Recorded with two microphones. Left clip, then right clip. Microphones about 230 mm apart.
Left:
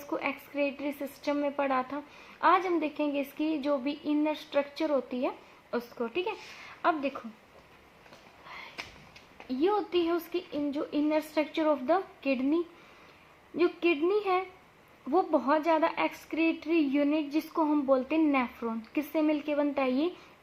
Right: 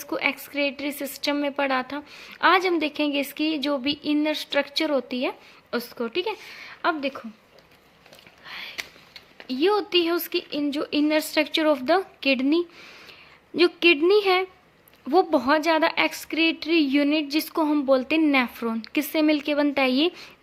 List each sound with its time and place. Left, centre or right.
0.1 s a woman's voice: right
8.4 s a sound: right
9.5 s a woman's voice: right